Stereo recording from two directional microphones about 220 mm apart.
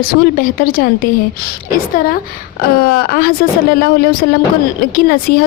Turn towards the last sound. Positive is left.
turn(degrees=40)  # may be behind; listen again after turning